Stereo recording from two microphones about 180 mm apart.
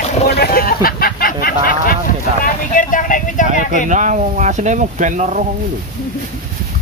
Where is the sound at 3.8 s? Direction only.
45° right (ahead or behind).